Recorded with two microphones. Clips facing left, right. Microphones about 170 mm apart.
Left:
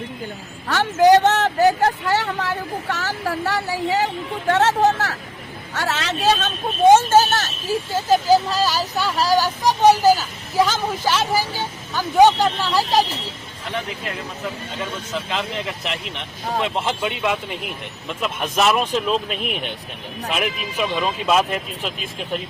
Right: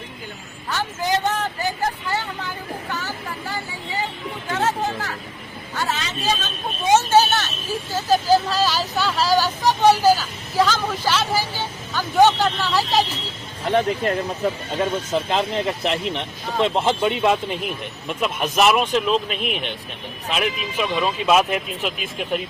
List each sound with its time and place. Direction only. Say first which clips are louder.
0.7 s vehicle: left 10 dB; 85° left
5.7 s speech: left 2 dB; 80° left; by 7.5 s 45° left (ahead or behind)
8.4 s speech: even; 10° left (ahead or behind)
13.7 s speech: right 9 dB; 45° right (ahead or behind); by 17.6 s 25° right (ahead or behind)
18.2 s speech: right 2 dB; 10° right (ahead or behind)
20.8 s speech: even; centre (ahead or behind)